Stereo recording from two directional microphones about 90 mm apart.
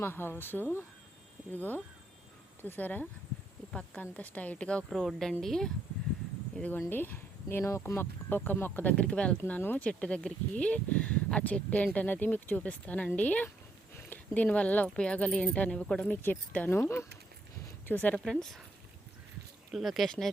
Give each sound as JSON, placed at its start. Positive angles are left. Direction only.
{"t": 0.0, "sound": "a woman's voice", "side_deg": 25}
{"t": 4.9, "sound": "speech", "side_deg": 0}
{"t": 6.6, "sound": "speech", "side_deg": 20}
{"t": 9.4, "sound": "speech", "side_deg": 25}
{"t": 17.8, "sound": "speech", "side_deg": 20}
{"t": 18.2, "sound": "speech", "side_deg": 5}
{"t": 19.7, "sound": "speech", "side_deg": 0}